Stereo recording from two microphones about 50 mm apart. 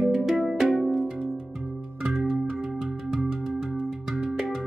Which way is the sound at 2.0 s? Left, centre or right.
Centre.